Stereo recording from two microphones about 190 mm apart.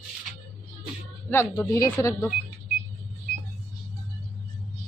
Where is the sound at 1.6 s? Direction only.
15° left (ahead or behind).